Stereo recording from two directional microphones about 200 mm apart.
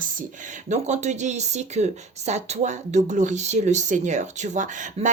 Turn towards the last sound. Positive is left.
turn(degrees=-40)  # may be behind; listen again after turning